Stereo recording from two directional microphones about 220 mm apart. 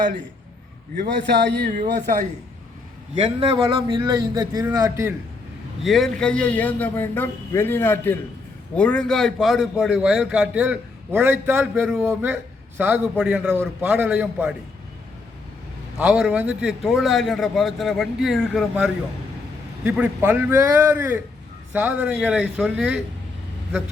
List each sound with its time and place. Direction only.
1.0 s speech: 50° right (ahead or behind)
3.4 s a man's voice: 20° right (ahead or behind)
5.8 s a man's voice: centre (ahead or behind)
16.0 s a man's voice: 5° right (ahead or behind)